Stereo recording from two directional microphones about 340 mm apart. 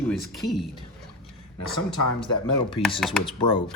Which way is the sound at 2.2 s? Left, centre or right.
Centre.